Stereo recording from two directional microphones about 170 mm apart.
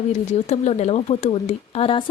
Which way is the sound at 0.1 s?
40° left (ahead or behind).